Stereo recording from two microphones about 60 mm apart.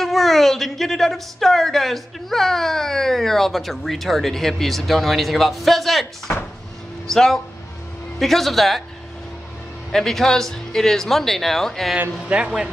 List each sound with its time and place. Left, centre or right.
0.0 s a woman's voice: centre
9.8 s a woman's voice: centre
12.3 s a man's voice: centre